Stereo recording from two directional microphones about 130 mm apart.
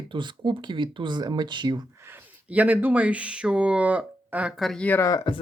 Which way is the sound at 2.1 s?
10° right (ahead or behind).